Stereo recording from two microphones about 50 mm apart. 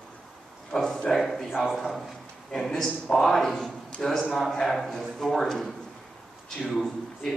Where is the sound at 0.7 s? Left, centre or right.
Centre.